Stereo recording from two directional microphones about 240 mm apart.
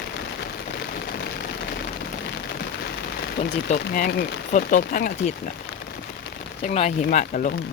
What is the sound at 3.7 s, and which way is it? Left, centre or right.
Speech, left.